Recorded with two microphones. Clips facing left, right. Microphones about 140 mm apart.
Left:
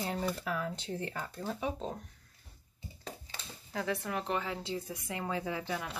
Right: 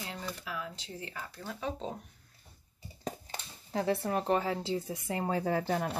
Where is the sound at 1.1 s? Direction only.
35° left (ahead or behind).